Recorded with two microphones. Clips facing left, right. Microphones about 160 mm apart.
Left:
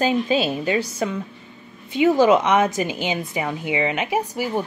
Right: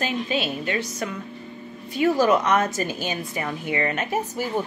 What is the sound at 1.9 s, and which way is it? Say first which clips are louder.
A woman's voice: left 4 dB; 15° left (ahead or behind).